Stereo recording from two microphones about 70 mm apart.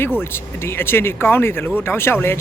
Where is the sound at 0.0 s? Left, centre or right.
Left.